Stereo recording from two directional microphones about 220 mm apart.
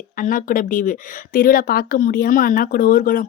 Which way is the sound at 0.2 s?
40° left (ahead or behind).